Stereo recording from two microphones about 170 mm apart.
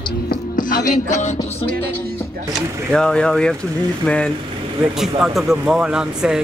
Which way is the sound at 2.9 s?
5° left (ahead or behind).